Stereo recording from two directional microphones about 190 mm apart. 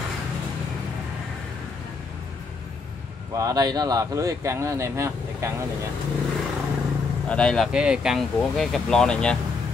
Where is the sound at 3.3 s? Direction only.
20° right (ahead or behind).